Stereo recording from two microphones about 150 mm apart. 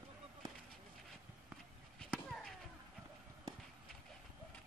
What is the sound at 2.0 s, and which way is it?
Chop, 5° left (ahead or behind).